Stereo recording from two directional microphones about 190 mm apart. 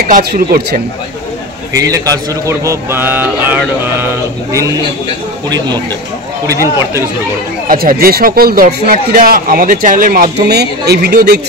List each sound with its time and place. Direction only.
0.1 s speech: 55° right (ahead or behind)
1.7 s a man's voice: 15° right (ahead or behind)
7.6 s a man's voice: 50° right (ahead or behind)